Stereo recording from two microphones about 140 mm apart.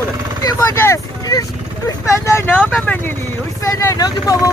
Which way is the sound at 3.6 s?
25° left (ahead or behind).